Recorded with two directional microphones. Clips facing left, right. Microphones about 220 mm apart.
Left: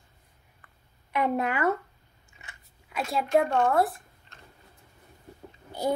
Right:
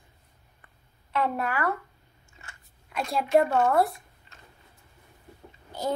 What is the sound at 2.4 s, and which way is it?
Biting, 20° left (ahead or behind).